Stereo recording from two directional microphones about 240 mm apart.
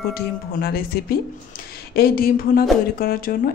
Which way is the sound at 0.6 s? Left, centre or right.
Left.